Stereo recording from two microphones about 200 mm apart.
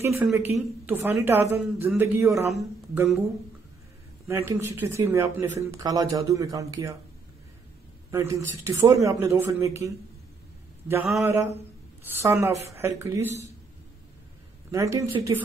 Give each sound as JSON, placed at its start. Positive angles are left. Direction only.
{"t": 0.0, "sound": "speech", "side_deg": -10}
{"t": 4.3, "sound": "speech", "side_deg": -15}
{"t": 8.1, "sound": "speech", "side_deg": -15}
{"t": 12.1, "sound": "speech", "side_deg": -10}
{"t": 14.7, "sound": "speech", "side_deg": -15}